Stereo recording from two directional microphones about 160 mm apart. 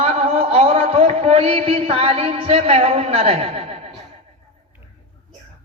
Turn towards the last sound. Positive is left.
turn(degrees=-40)  # may be behind; listen again after turning